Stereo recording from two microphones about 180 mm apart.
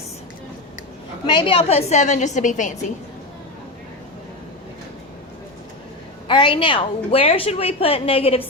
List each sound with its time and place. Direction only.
1.3 s a woman's voice: 25° left (ahead or behind); by 2.7 s 45° left (ahead or behind)
6.2 s a woman's voice: 25° left (ahead or behind)